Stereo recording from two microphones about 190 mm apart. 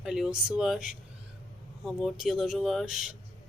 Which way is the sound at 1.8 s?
Centre (ahead or behind).